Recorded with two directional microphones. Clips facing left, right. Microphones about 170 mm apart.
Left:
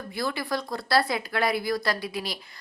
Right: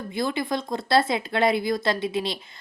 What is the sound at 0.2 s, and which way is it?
Speech, 20° right (ahead or behind).